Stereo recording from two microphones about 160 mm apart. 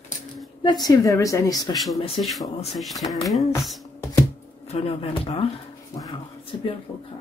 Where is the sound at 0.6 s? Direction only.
25° left (ahead or behind).